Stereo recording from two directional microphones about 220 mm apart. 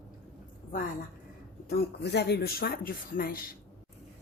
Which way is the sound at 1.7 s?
45° left (ahead or behind).